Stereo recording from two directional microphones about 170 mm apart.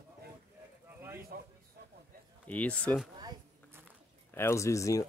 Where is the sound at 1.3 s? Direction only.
60° right (ahead or behind).